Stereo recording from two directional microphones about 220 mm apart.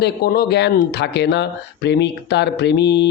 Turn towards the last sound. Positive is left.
turn(degrees=50)  # may be behind; listen again after turning